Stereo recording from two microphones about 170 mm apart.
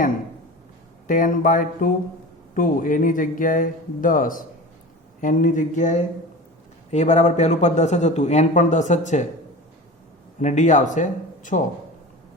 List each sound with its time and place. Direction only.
1.0 s a man's voice: 50° left (ahead or behind)
10.4 s a man's voice: 45° left (ahead or behind)